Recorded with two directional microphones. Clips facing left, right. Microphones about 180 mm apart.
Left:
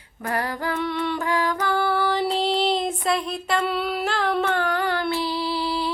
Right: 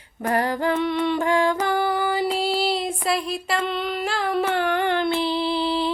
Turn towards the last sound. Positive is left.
turn(degrees=-25)  # may be behind; listen again after turning